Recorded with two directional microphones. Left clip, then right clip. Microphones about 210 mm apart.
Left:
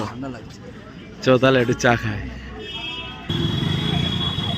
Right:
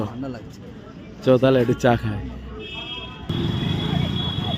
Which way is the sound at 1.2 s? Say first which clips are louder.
Left 1 dB; 10° right (ahead or behind).